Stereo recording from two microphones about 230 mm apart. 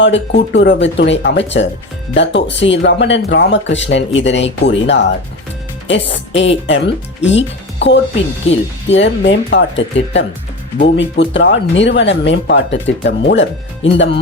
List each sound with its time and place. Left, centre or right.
0.0 s speech: left
8.4 s speech: left
9.0 s speech: left